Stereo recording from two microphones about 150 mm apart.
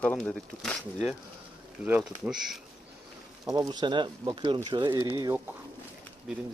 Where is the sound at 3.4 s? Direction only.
25° right (ahead or behind).